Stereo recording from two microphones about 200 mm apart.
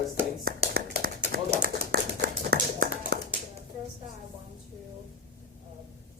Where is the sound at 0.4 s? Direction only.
55° right (ahead or behind).